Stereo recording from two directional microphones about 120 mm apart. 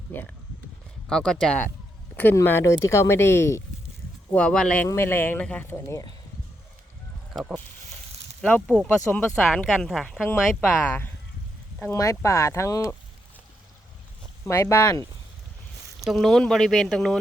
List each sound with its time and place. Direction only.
1.0 s speech: 5° left (ahead or behind)
2.1 s speech: 15° left (ahead or behind)
4.3 s speech: 10° left (ahead or behind)
4.9 s speech: 20° left (ahead or behind)
8.4 s speech: 10° left (ahead or behind)
10.2 s speech: 15° left (ahead or behind)
14.4 s speech: 20° left (ahead or behind)
16.0 s speech: centre (ahead or behind)